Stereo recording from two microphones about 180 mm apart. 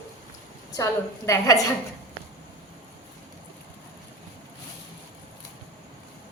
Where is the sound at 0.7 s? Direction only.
20° left (ahead or behind).